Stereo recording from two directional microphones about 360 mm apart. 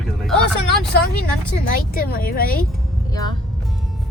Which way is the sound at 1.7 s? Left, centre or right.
Left.